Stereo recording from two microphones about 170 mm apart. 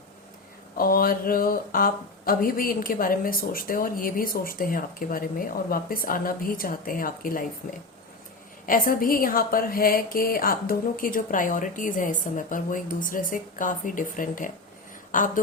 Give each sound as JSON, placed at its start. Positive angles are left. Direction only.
{"t": 0.8, "sound": "a woman's voice", "side_deg": 60}